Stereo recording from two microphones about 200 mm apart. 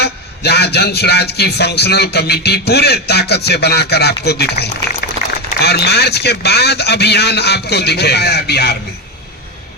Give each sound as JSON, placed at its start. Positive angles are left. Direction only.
{"t": 0.0, "sound": "a man's voice", "side_deg": 55}